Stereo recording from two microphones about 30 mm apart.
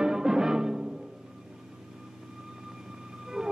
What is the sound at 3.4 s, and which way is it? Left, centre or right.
Music, centre.